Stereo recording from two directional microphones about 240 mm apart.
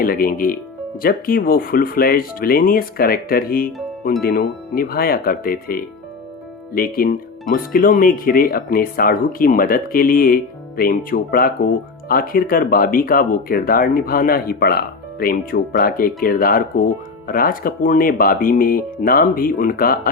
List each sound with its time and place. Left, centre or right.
0.0 s speech: left